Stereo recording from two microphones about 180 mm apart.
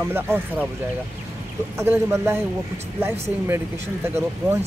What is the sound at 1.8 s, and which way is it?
Speech, 15° right (ahead or behind).